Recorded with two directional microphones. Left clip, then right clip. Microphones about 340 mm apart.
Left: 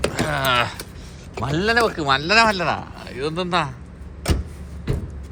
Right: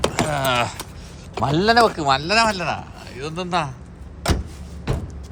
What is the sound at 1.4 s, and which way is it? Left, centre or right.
Speech, centre.